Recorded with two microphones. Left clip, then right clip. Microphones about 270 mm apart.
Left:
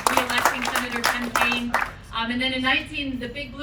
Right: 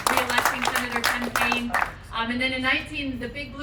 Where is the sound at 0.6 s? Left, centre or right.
Right.